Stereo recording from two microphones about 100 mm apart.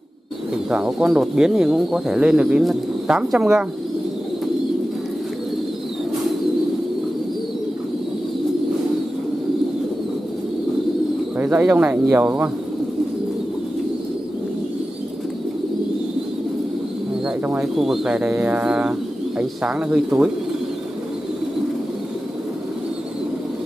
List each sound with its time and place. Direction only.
0.7 s speech: 10° right (ahead or behind)
11.3 s speech: 15° right (ahead or behind)
17.6 s speech: 5° right (ahead or behind)